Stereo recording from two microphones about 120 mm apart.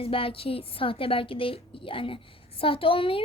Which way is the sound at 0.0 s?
50° left (ahead or behind).